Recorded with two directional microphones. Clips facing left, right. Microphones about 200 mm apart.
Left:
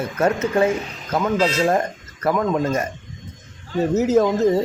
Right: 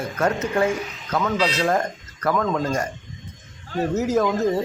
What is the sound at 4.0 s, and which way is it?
Speech, 25° left (ahead or behind).